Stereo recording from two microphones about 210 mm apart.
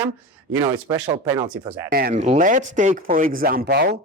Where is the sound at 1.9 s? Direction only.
45° right (ahead or behind).